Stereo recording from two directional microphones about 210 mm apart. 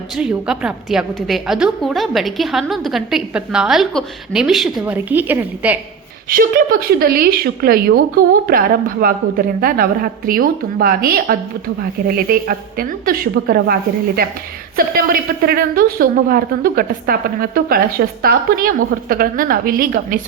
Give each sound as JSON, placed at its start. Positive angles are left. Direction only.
{"t": 0.2, "sound": "a woman's voice", "side_deg": -5}
{"t": 6.2, "sound": "a woman's voice", "side_deg": -40}
{"t": 14.8, "sound": "a woman's voice", "side_deg": -45}